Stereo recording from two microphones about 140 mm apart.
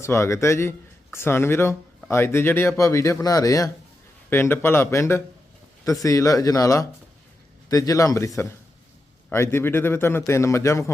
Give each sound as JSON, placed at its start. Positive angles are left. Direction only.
{"t": 0.0, "sound": "a man's voice", "side_deg": 20}